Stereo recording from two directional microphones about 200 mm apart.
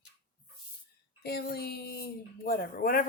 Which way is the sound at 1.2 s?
50° left (ahead or behind).